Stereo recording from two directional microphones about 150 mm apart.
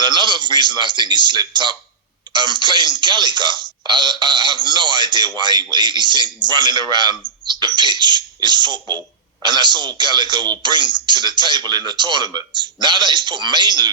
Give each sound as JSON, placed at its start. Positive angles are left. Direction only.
{"t": 0.0, "sound": "a man's voice", "side_deg": -30}
{"t": 7.4, "sound": "a sound", "side_deg": -30}
{"t": 7.8, "sound": "a man's voice", "side_deg": -30}